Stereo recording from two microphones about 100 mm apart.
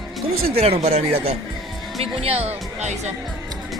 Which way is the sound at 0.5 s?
90° right.